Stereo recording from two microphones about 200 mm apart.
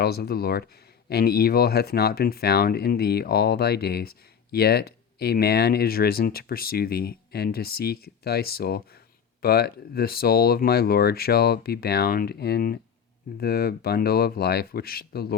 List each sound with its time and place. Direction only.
0.0 s speech: 50° left (ahead or behind)